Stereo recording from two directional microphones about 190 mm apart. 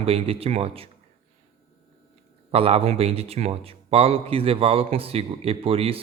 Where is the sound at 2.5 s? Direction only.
30° right (ahead or behind).